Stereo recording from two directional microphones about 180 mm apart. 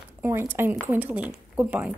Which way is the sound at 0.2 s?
15° right (ahead or behind).